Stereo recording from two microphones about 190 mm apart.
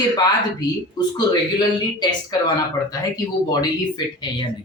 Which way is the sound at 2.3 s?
20° left (ahead or behind).